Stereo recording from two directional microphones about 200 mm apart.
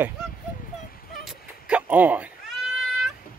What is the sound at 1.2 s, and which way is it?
Cat, 5° right (ahead or behind).